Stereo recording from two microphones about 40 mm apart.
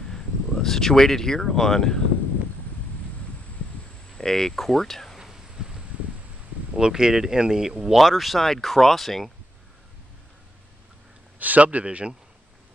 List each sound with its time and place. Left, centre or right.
0.1 s speech: centre
4.2 s speech: centre
5.2 s a sound: centre
6.8 s speech: centre
8.0 s speech: centre
11.3 s a man's voice: right
11.8 s a man's voice: right